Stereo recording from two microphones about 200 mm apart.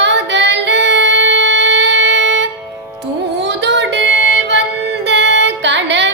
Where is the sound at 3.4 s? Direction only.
60° right (ahead or behind).